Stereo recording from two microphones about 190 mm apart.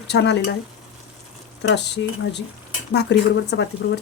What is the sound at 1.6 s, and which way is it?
Speech, 65° left (ahead or behind).